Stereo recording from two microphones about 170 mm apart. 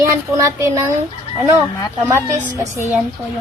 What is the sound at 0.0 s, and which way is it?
Speech, 15° right (ahead or behind).